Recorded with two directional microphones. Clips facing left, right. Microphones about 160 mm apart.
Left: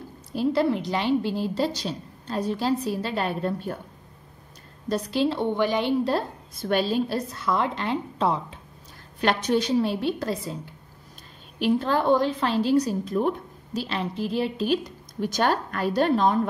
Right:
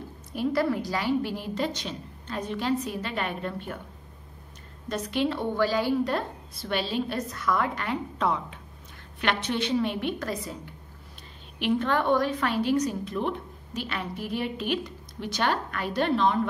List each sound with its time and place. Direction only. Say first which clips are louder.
0.3 s a woman's voice: left 3 dB; 30° left (ahead or behind)
4.8 s a woman's voice: left 3 dB; 35° left (ahead or behind)
6.5 s a woman's voice: left 6 dB; 45° left (ahead or behind)
13.7 s a woman's voice: left 5 dB; 30° left (ahead or behind)